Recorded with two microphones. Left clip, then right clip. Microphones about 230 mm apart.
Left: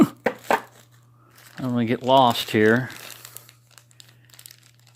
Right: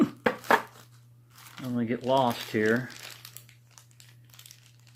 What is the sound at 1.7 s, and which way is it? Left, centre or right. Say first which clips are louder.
Speech: left 7 dB; left.